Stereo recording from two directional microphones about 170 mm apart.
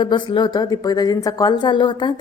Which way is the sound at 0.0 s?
30° left (ahead or behind).